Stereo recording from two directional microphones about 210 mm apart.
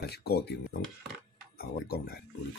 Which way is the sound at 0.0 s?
50° left (ahead or behind).